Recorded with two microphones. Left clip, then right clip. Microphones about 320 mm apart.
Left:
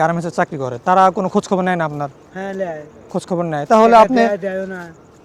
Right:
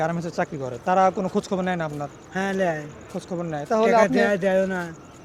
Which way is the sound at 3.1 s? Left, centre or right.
Left.